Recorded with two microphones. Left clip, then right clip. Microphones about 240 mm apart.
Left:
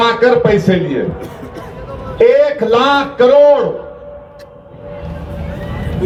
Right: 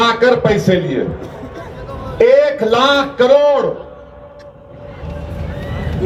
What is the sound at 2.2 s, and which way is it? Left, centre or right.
A man's voice, right.